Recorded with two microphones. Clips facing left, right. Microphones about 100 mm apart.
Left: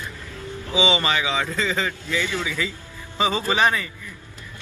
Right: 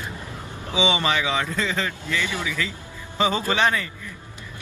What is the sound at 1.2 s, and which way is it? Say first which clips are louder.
Speech: even; 10° left (ahead or behind).